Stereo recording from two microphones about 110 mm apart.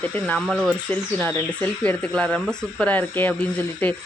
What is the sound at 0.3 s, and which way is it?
Speech, centre (ahead or behind).